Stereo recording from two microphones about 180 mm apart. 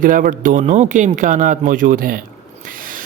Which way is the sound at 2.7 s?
50° right (ahead or behind).